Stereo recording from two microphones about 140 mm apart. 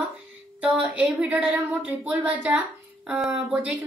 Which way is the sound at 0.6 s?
10° right (ahead or behind).